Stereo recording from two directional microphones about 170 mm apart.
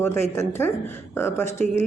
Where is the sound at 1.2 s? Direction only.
15° left (ahead or behind).